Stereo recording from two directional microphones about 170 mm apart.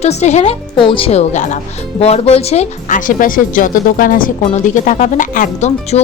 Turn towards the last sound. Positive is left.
turn(degrees=40)  # may be behind; listen again after turning